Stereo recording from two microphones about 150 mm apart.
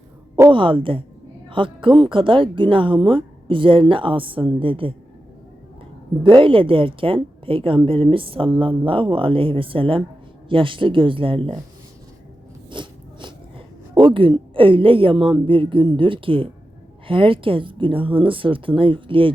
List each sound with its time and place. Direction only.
0.5 s speech: 35° right (ahead or behind)
6.2 s speech: 35° right (ahead or behind)
12.7 s biting: 30° right (ahead or behind)
13.9 s speech: 35° right (ahead or behind)